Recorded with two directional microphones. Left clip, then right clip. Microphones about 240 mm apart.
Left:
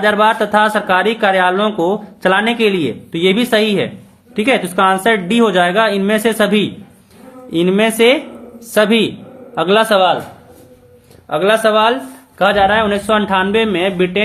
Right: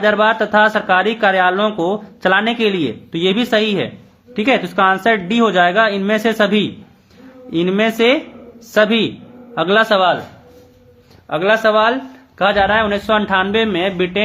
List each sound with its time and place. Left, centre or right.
0.0 s a man's voice: centre
11.3 s a man's voice: centre